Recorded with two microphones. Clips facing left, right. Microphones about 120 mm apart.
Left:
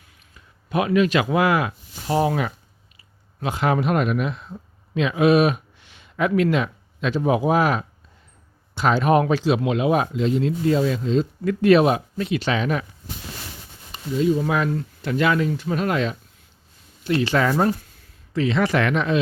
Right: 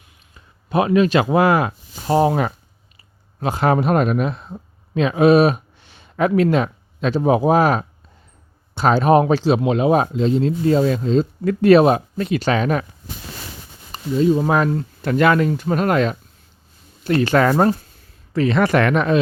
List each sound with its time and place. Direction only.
0.3 s speech: 35° right (ahead or behind)
13.9 s speech: 40° right (ahead or behind)
15.1 s speech: 55° right (ahead or behind)